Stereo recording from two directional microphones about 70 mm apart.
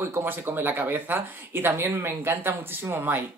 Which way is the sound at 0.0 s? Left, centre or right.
Right.